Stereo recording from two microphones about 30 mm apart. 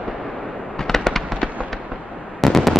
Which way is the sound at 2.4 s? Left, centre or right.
Centre.